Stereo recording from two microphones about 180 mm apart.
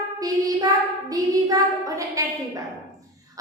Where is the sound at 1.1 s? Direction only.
20° right (ahead or behind).